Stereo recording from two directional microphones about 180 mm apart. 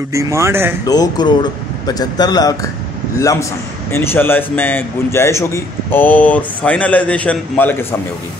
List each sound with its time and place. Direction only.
0.1 s speech: 15° right (ahead or behind)
0.8 s a man's voice: 20° left (ahead or behind)